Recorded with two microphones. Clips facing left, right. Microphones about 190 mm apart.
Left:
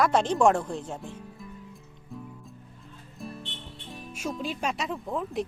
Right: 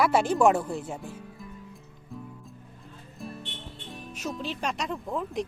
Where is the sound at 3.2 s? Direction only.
Centre (ahead or behind).